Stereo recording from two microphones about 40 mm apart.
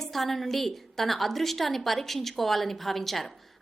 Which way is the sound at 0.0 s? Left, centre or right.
Centre.